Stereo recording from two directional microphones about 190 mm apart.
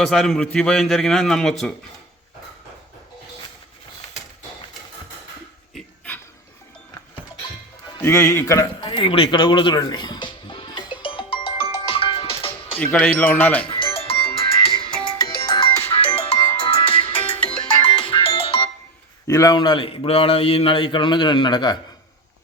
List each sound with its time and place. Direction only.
0.0 s a man's voice: centre (ahead or behind)
8.0 s speech: 15° left (ahead or behind)
8.8 s music: 25° left (ahead or behind)
12.8 s speech: 5° left (ahead or behind)
13.7 s music: 25° left (ahead or behind)
19.3 s a man's voice: 20° left (ahead or behind)